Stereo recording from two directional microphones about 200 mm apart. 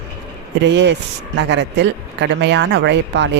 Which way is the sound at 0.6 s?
65° right (ahead or behind).